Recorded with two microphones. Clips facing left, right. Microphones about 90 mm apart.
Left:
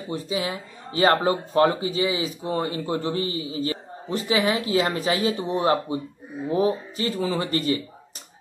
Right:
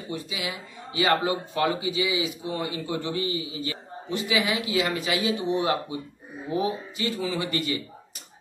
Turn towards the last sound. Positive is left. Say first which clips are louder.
# left 3 dB
turn(degrees=35)  # may be behind; listen again after turning